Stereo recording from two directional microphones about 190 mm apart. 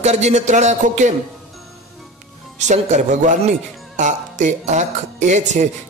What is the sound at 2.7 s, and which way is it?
A man's voice, 40° right (ahead or behind).